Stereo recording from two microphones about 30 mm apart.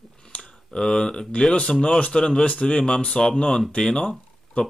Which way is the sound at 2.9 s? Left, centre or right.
Left.